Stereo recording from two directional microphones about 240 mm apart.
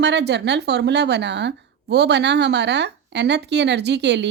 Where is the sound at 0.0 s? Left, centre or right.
Right.